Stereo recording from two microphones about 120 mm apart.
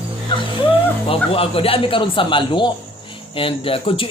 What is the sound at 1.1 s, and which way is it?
Speech, 50° left (ahead or behind).